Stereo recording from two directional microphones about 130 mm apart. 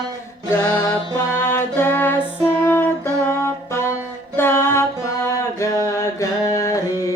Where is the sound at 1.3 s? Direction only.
20° left (ahead or behind).